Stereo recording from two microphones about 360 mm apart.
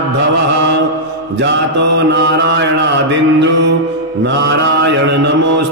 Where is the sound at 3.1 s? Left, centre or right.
Right.